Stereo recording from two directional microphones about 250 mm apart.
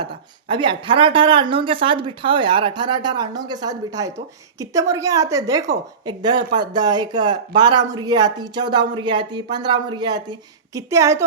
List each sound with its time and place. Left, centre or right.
0.5 s a woman's voice: centre